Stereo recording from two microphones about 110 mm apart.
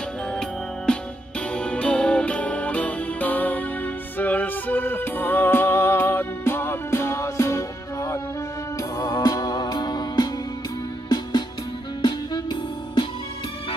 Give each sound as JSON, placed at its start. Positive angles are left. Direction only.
{"t": 0.9, "sound": "music", "side_deg": 10}
{"t": 12.0, "sound": "music", "side_deg": 45}